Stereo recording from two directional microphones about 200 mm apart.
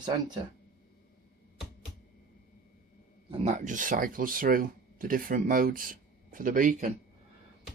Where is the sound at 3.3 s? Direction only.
35° right (ahead or behind).